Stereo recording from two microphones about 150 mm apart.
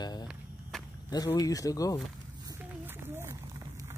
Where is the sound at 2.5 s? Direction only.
15° right (ahead or behind).